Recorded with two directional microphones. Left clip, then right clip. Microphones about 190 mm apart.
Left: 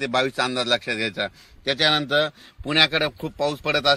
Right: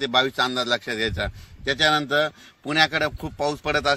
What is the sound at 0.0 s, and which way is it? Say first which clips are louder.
A man's voice: right 1 dB; 40° left (ahead or behind).